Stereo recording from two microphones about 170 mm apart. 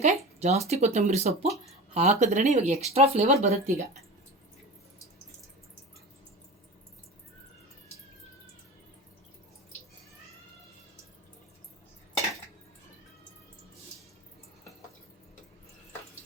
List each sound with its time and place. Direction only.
0.0 s speech: 40° right (ahead or behind)